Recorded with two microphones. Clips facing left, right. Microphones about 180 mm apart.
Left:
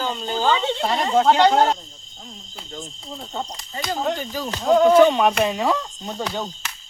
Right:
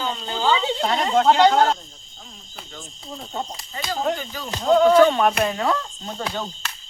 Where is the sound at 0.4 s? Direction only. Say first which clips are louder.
Even; 5° right (ahead or behind).